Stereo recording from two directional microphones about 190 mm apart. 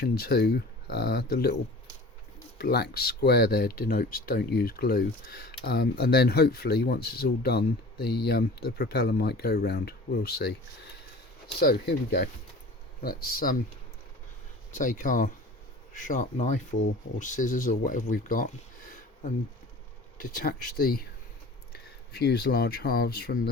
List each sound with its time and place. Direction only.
0.0 s speech: 55° left (ahead or behind)
2.6 s speech: 55° left (ahead or behind)
11.6 s speech: 55° left (ahead or behind)
14.7 s speech: 45° left (ahead or behind)
20.1 s speech: 50° left (ahead or behind)